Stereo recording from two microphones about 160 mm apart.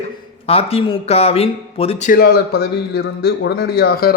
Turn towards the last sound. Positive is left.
turn(degrees=70)  # may be behind; listen again after turning